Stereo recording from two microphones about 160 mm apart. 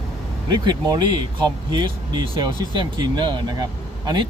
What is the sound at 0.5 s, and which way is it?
Speech, 25° right (ahead or behind).